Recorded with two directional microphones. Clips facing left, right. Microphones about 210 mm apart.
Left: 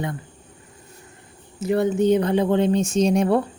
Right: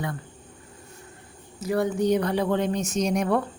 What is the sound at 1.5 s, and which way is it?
Speech, 25° left (ahead or behind).